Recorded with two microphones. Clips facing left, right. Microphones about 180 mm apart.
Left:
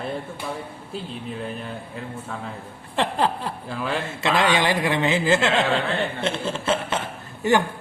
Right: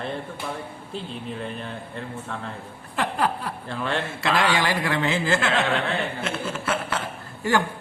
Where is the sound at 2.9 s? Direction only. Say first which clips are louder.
Left 2 dB; 25° left (ahead or behind).